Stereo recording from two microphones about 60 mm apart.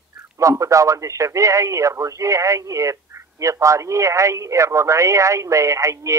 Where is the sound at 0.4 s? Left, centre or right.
Right.